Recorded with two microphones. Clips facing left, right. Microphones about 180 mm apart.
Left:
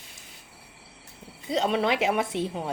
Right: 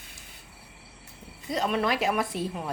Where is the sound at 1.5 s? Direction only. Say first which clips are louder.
Left 2 dB; 30° left (ahead or behind).